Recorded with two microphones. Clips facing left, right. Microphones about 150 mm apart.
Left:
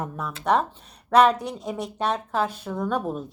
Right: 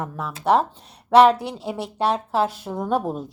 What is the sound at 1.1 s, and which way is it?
A woman's voice, 30° right (ahead or behind).